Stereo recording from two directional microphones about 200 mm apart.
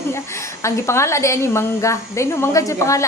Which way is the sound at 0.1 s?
15° left (ahead or behind).